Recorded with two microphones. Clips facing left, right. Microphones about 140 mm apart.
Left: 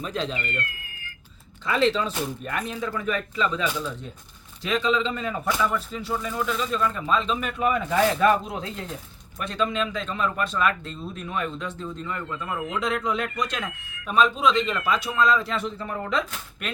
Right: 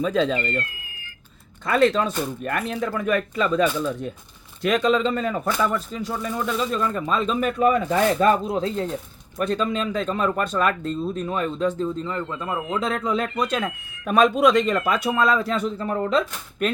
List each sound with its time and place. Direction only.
0.3 s speech: 35° right (ahead or behind)
1.6 s speech: 55° right (ahead or behind); by 13.7 s 30° right (ahead or behind)
14.1 s speech: 65° right (ahead or behind)
14.6 s speech: 40° right (ahead or behind)